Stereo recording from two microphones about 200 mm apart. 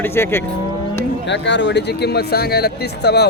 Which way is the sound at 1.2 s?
60° left (ahead or behind).